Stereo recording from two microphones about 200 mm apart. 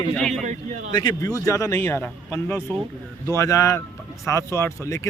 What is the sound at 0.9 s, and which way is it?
A man's voice, 20° left (ahead or behind).